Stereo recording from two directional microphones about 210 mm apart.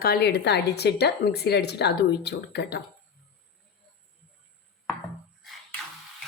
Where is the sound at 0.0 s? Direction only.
50° left (ahead or behind).